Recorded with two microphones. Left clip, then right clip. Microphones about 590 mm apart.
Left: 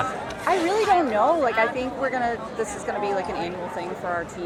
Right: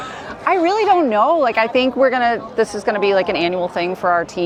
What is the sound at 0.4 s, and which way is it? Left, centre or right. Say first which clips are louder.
A woman's voice: right 6 dB; right.